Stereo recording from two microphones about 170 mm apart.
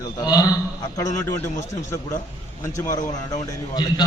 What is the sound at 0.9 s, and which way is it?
Speech, 20° left (ahead or behind).